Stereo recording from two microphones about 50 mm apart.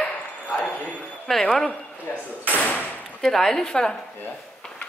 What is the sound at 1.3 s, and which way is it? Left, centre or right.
Music, centre.